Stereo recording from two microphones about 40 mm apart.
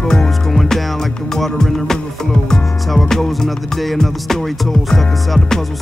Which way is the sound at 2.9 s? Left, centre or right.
Centre.